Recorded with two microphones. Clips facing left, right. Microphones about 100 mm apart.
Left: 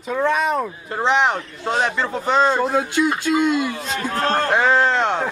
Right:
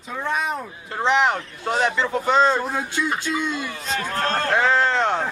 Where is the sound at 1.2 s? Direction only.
Centre (ahead or behind).